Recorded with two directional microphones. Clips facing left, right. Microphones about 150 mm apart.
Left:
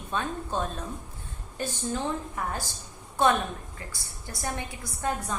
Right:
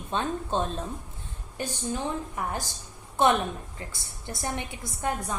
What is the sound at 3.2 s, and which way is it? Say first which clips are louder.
A woman's voice: right 1 dB; 20° right (ahead or behind).